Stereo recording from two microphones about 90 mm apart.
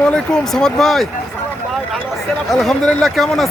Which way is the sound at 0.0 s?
10° left (ahead or behind).